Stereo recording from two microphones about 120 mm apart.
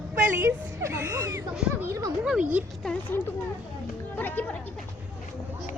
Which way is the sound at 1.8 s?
25° right (ahead or behind).